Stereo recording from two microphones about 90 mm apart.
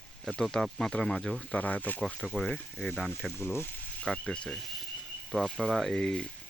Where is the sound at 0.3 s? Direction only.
5° left (ahead or behind).